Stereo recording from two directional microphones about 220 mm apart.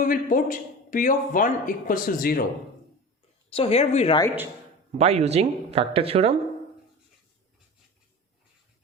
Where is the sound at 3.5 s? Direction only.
25° left (ahead or behind).